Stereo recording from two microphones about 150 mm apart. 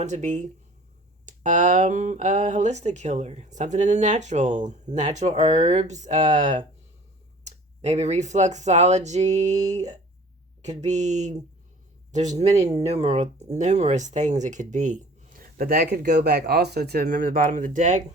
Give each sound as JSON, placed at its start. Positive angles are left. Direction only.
{"t": 0.0, "sound": "speech", "side_deg": -50}